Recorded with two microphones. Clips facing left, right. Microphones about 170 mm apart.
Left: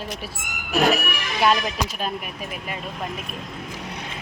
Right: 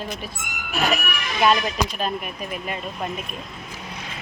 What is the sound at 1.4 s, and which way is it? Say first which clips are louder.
Speech: right 1 dB; 5° left (ahead or behind).